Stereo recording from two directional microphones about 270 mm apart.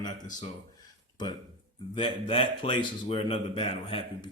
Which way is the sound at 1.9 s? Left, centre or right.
Centre.